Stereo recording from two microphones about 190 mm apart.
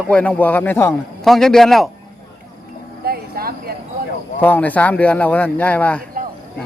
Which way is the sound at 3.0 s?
55° right (ahead or behind).